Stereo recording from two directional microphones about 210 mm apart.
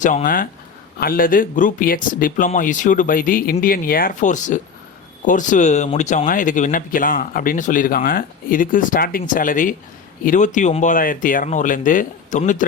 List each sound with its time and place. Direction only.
0.0 s speech: 40° left (ahead or behind)